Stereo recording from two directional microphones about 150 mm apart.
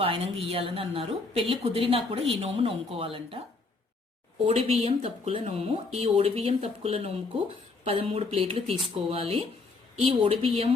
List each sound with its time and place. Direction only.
0.0 s speech: 40° right (ahead or behind)
4.4 s speech: 40° right (ahead or behind)